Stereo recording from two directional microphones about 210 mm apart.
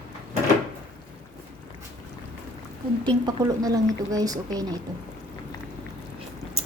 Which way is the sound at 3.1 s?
15° right (ahead or behind).